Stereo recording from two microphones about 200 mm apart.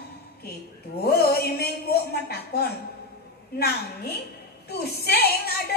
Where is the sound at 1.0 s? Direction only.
50° left (ahead or behind).